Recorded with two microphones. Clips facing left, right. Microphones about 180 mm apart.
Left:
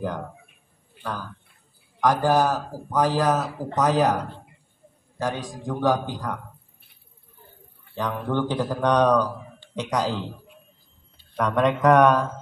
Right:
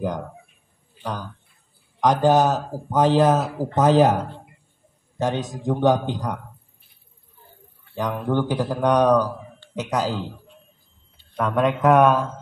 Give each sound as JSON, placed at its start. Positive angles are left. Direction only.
{"t": 1.0, "sound": "a man's voice", "side_deg": -20}
{"t": 5.2, "sound": "a man's voice", "side_deg": -25}
{"t": 7.9, "sound": "speech", "side_deg": -10}
{"t": 11.3, "sound": "a man's voice", "side_deg": 0}